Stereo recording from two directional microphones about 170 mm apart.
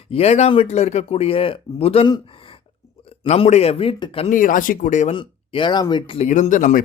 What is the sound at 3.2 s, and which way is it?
A man's voice, 40° left (ahead or behind).